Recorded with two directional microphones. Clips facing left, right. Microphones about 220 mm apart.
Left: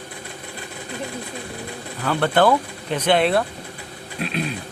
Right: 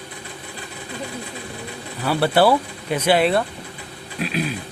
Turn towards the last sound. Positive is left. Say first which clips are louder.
# right 1 dB
turn(degrees=-5)  # may be behind; listen again after turning